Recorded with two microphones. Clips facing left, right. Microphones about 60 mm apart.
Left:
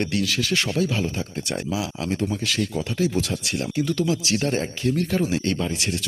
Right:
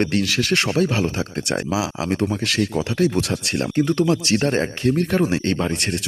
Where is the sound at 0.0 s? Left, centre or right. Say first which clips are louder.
Right 4 dB; right.